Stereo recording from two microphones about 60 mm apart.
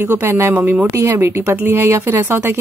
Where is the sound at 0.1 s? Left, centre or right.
Right.